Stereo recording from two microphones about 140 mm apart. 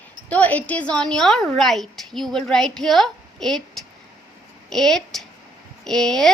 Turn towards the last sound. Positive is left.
turn(degrees=5)  # may be behind; listen again after turning